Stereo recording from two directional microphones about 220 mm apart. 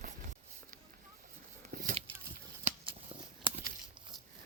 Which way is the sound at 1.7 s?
40° right (ahead or behind).